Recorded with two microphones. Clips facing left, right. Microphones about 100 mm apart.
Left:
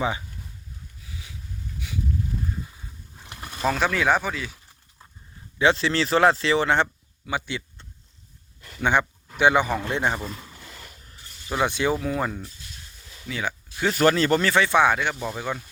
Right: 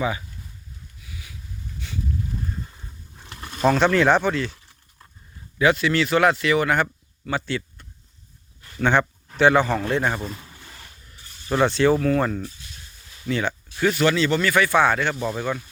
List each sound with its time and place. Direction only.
1.0 s a sound: 30° left (ahead or behind)
1.8 s a sound: 10° left (ahead or behind)
3.6 s speech: centre (ahead or behind)
5.5 s speech: 30° left (ahead or behind)
7.3 s a man's voice: 15° left (ahead or behind)
11.4 s speech: 10° left (ahead or behind)
13.9 s speech: 40° left (ahead or behind)
14.5 s speech: 20° left (ahead or behind)
15.1 s speech: centre (ahead or behind)